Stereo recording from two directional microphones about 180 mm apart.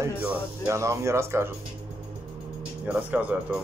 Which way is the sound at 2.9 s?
10° right (ahead or behind).